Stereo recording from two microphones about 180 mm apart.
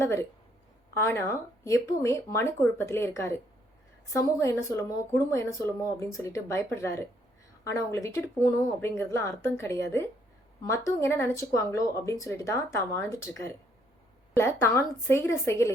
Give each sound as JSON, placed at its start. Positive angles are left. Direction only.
{"t": 0.0, "sound": "speech", "side_deg": 15}